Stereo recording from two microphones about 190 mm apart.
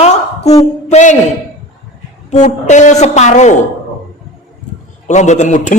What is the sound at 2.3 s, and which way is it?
A man's voice, 40° left (ahead or behind).